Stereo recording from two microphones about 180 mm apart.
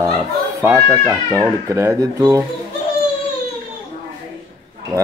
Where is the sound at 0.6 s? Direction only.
15° right (ahead or behind).